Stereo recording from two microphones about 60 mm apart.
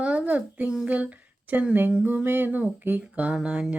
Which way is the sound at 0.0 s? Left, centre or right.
Right.